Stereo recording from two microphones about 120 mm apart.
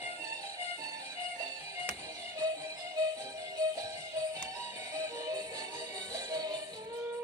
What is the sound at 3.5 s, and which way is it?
Music, 30° right (ahead or behind).